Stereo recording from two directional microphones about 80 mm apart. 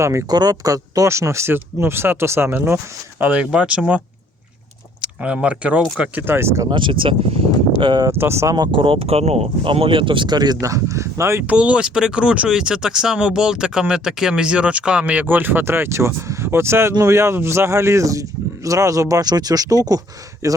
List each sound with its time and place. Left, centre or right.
0.0 s speech: right
0.3 s speech: right; by 6.2 s centre
6.2 s speech: right
6.7 s speech: right
7.8 s speech: right
8.2 s speech: right
8.5 s speech: right
9.6 s speech: right
10.6 s speech: right
11.4 s speech: centre; by 20.6 s right